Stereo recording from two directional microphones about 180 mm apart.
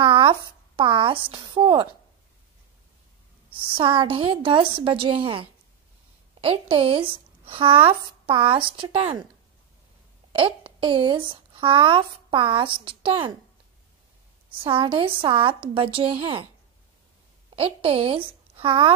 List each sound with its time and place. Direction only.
0.0 s a sound: 30° right (ahead or behind)
0.7 s a woman's voice: 30° right (ahead or behind)
3.4 s speech: 30° right (ahead or behind)
10.3 s speech: 30° right (ahead or behind)
14.6 s speech: 30° right (ahead or behind)
17.6 s a woman's voice: 30° right (ahead or behind)